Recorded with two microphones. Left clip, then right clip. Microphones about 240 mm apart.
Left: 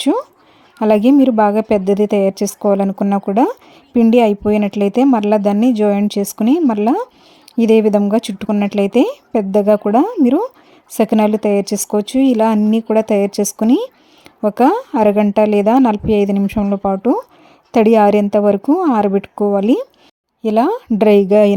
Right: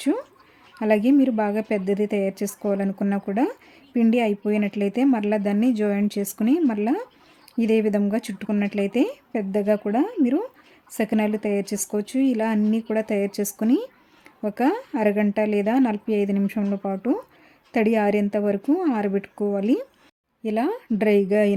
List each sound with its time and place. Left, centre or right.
0.0 s a woman's voice: left
13.7 s speech: centre
14.4 s a woman's voice: left